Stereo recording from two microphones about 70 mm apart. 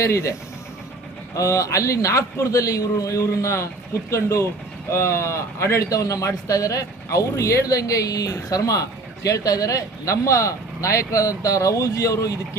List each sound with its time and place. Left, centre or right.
0.0 s a man's voice: left
1.4 s a man's voice: left
5.9 s a man's voice: left